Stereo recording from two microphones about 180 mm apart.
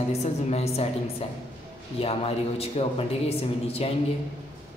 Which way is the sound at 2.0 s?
35° left (ahead or behind).